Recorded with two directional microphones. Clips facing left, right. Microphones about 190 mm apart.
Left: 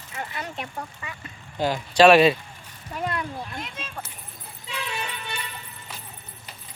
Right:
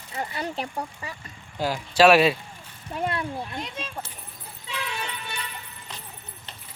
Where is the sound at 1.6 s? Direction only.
5° right (ahead or behind).